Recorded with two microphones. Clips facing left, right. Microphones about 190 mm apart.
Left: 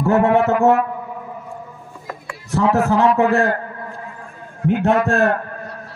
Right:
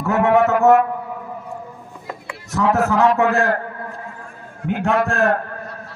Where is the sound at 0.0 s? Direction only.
35° left (ahead or behind).